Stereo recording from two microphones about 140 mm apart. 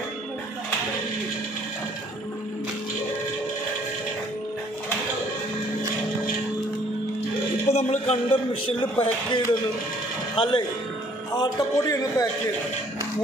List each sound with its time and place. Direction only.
7.6 s a man's voice: 50° left (ahead or behind)
9.0 s speech: 35° left (ahead or behind)